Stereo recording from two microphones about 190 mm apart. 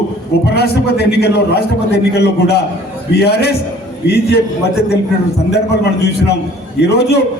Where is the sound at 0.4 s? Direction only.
60° left (ahead or behind).